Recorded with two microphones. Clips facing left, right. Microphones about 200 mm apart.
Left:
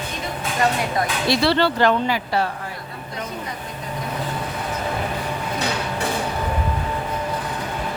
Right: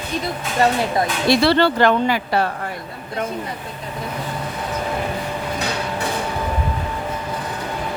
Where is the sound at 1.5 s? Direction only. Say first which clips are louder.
Even; 50° right (ahead or behind).